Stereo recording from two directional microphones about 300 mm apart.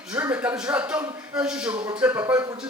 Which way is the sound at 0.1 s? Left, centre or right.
Centre.